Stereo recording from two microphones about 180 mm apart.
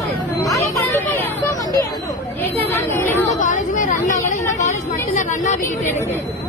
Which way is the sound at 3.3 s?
45° left (ahead or behind).